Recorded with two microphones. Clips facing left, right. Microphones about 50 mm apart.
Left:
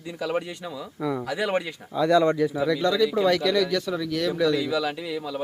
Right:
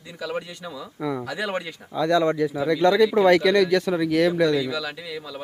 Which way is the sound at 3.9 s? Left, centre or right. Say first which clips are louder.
Right 6 dB; right.